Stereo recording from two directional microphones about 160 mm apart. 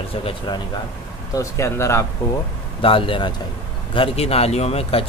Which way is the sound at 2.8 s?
35° left (ahead or behind).